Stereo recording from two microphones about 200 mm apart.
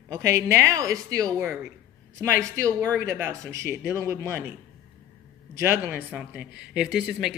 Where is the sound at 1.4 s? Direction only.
5° right (ahead or behind).